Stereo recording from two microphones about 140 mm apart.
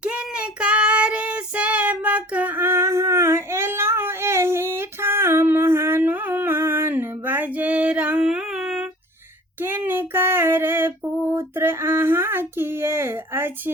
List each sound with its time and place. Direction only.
0.0 s child singing: 10° right (ahead or behind)
9.6 s female singing: 15° right (ahead or behind)